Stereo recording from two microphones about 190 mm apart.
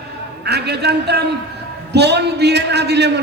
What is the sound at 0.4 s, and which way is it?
A man's voice, 60° right (ahead or behind).